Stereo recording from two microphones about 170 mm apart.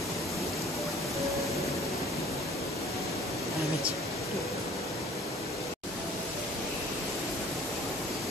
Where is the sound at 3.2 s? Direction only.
Centre (ahead or behind).